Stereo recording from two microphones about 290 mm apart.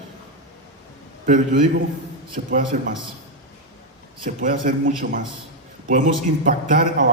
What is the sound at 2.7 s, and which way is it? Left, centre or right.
Speech, right.